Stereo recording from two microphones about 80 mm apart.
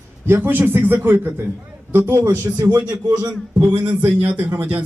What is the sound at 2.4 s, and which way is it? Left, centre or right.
Speech, right.